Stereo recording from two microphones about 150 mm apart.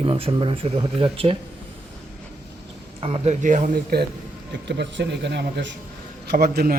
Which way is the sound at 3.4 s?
55° right (ahead or behind).